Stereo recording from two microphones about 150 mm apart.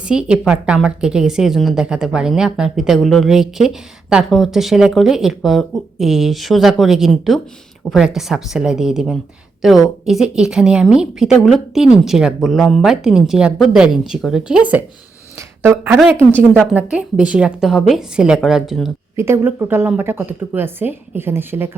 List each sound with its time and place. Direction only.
0.0 s a woman's voice: 5° right (ahead or behind)
15.4 s a sound: 15° right (ahead or behind)
16.3 s a woman's voice: 10° right (ahead or behind)
19.1 s speech: 15° right (ahead or behind)